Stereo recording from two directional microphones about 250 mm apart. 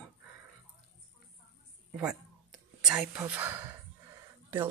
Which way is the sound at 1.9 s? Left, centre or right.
Centre.